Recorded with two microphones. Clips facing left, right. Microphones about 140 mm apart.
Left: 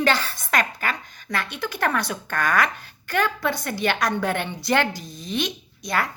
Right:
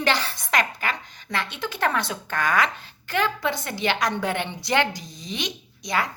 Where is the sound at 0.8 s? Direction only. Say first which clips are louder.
Left 1 dB; 20° right (ahead or behind).